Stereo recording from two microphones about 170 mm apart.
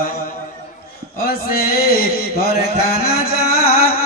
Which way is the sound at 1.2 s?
65° left (ahead or behind).